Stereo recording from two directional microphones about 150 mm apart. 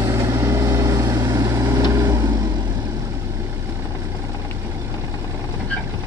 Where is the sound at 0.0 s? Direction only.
20° right (ahead or behind).